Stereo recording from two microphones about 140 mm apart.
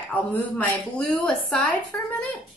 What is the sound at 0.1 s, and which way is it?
A woman's voice, 10° left (ahead or behind).